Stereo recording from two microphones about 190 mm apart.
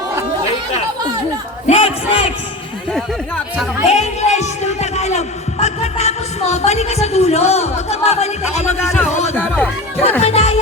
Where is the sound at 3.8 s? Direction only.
35° left (ahead or behind).